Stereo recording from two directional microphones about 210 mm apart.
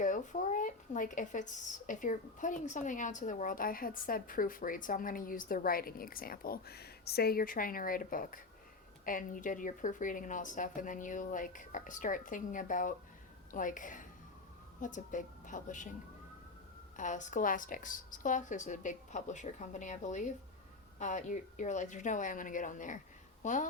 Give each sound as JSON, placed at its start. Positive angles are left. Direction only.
{"t": 0.0, "sound": "a woman's voice", "side_deg": 35}
{"t": 17.0, "sound": "speech", "side_deg": 35}